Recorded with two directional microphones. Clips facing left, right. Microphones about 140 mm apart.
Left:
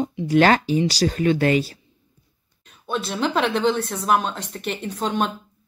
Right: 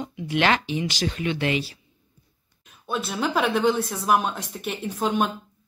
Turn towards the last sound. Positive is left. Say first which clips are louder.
# even
turn(degrees=-10)  # may be behind; listen again after turning